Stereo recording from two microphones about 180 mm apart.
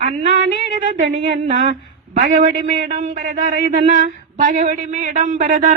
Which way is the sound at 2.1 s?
45° right (ahead or behind).